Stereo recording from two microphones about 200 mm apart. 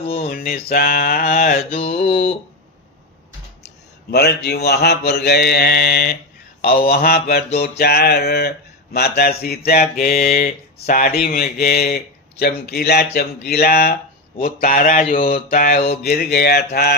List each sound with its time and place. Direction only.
0.1 s speech: 40° left (ahead or behind)
4.1 s speech: 55° left (ahead or behind)